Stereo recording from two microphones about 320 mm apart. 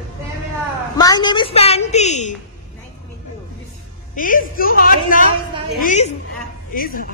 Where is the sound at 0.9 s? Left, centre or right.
Centre.